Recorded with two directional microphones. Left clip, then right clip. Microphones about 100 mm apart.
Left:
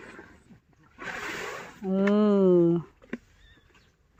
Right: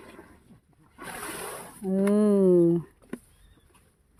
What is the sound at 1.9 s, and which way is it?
Speech, 25° right (ahead or behind).